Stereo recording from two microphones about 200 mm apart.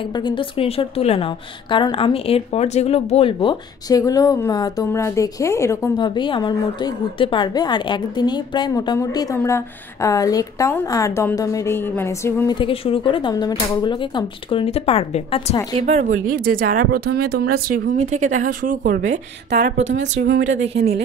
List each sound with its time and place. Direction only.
0.1 s a woman's voice: 25° left (ahead or behind)
15.8 s speech: 45° right (ahead or behind)
17.9 s speech: 35° right (ahead or behind)
19.5 s a woman's voice: 60° right (ahead or behind)